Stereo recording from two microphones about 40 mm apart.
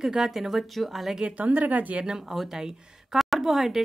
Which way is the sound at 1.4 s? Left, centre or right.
Right.